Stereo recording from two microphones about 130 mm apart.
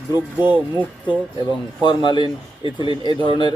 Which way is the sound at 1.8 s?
35° left (ahead or behind).